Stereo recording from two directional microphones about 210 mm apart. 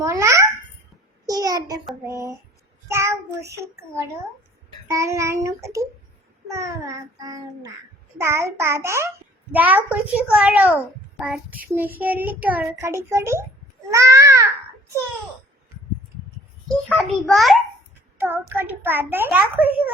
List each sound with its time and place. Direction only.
0.0 s babbling: 15° right (ahead or behind)
1.3 s a sound: 15° right (ahead or behind)
2.0 s child singing: 15° right (ahead or behind)
16.6 s a child's voice: centre (ahead or behind)
18.2 s child singing: 10° right (ahead or behind)